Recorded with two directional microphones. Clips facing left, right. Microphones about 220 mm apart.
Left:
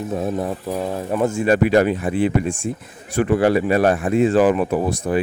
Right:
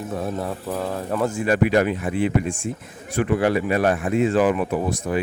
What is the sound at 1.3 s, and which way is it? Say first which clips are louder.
Speech: left 3 dB; 25° left (ahead or behind).